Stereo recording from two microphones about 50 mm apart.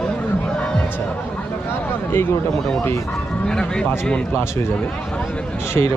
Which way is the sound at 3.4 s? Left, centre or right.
Centre.